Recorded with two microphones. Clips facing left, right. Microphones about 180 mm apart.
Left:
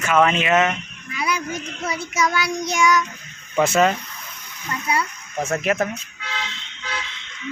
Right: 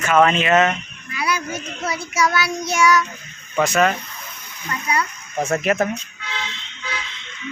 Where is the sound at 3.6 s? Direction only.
25° left (ahead or behind).